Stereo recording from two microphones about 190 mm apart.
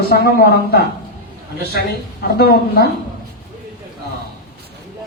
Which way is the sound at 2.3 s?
55° left (ahead or behind).